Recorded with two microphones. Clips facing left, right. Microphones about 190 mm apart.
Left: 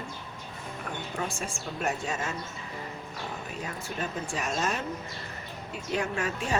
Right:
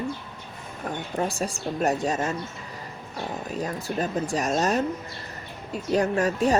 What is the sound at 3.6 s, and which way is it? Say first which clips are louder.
Speech: right 8 dB; 40° right (ahead or behind).